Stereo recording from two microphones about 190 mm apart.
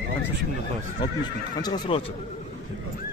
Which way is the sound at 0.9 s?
20° left (ahead or behind).